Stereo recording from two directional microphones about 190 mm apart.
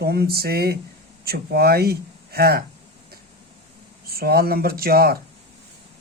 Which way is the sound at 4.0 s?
50° right (ahead or behind).